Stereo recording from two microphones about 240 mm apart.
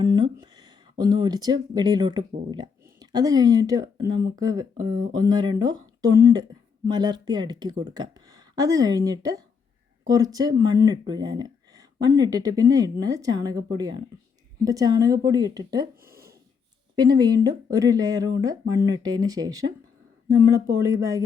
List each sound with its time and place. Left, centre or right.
0.0 s speech: centre
16.9 s speech: centre